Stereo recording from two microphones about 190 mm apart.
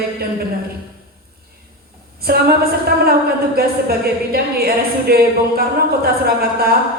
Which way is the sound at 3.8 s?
55° right (ahead or behind).